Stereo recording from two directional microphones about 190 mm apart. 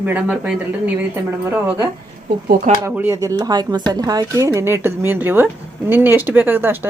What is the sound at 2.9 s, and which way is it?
Speech, 10° right (ahead or behind).